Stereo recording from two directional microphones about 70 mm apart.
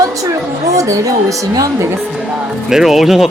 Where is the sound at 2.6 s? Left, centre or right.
Centre.